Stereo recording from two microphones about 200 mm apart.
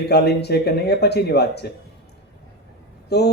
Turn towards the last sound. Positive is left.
turn(degrees=55)  # may be behind; listen again after turning